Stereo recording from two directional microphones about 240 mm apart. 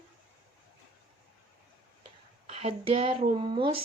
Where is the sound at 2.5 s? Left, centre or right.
Right.